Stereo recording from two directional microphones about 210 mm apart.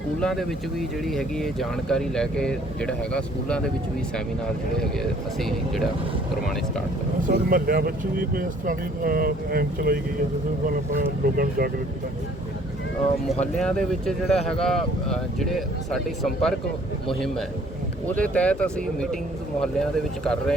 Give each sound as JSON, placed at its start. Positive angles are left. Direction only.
{"t": 0.2, "sound": "speech", "side_deg": 0}
{"t": 5.4, "sound": "speech", "side_deg": 0}
{"t": 7.3, "sound": "speech", "side_deg": -45}
{"t": 13.6, "sound": "speech", "side_deg": 5}